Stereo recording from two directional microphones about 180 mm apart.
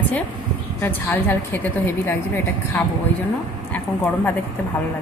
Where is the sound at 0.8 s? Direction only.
10° left (ahead or behind).